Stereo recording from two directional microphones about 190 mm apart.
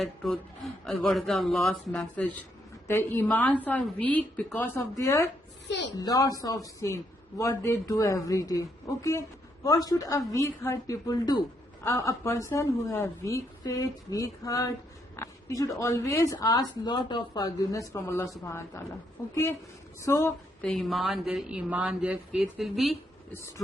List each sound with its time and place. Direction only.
0.0 s a woman's voice: centre (ahead or behind)
5.6 s a sound: 65° left (ahead or behind)
6.0 s a man's voice: 20° left (ahead or behind); by 23.0 s centre (ahead or behind)